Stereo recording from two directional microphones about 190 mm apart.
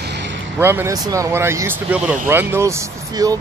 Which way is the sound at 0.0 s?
65° right (ahead or behind).